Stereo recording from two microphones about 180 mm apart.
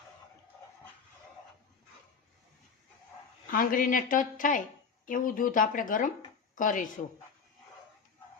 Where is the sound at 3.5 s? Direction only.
50° left (ahead or behind).